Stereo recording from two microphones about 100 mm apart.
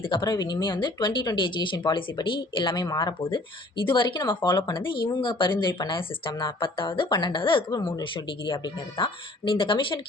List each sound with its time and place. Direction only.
0.0 s a woman's voice: 50° left (ahead or behind)
8.1 s a woman's voice: 55° left (ahead or behind)